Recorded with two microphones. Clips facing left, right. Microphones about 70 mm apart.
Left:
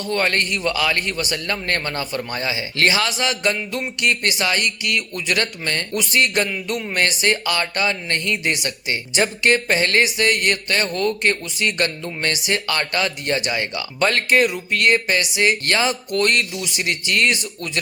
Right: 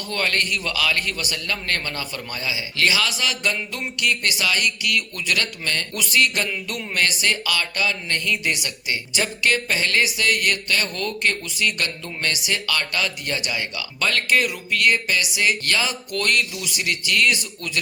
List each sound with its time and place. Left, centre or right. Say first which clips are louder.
0.1 s speech: left 3 dB; left
6.7 s music: left 4 dB; left
7.0 s speech: left 2 dB; left